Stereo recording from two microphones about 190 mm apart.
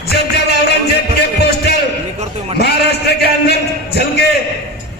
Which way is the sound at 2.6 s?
60° left (ahead or behind).